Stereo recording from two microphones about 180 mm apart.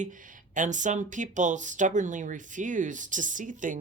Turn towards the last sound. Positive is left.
turn(degrees=-45)  # may be behind; listen again after turning